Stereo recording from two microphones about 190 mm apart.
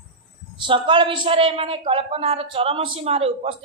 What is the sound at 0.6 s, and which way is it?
A woman's voice, 25° right (ahead or behind).